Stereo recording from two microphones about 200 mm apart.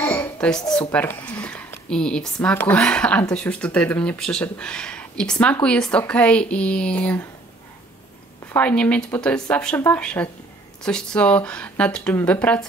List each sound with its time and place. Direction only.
0.0 s speech: 10° left (ahead or behind)
8.5 s speech: 5° left (ahead or behind)